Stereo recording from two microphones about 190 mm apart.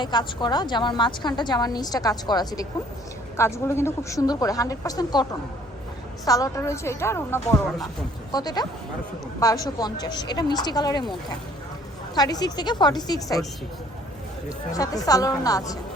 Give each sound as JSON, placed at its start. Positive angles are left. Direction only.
{"t": 0.0, "sound": "a woman's voice", "side_deg": 25}
{"t": 12.1, "sound": "a woman's voice", "side_deg": 20}
{"t": 14.7, "sound": "a woman's voice", "side_deg": 20}